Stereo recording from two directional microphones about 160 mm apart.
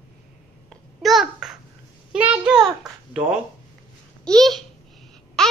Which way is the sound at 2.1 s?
10° right (ahead or behind).